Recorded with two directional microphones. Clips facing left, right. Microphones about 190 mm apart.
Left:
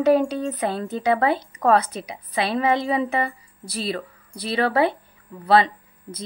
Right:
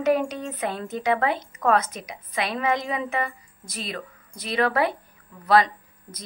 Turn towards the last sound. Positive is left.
turn(degrees=30)  # may be behind; listen again after turning